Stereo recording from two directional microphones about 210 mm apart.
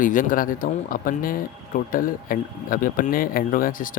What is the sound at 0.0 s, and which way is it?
Speech, 40° left (ahead or behind).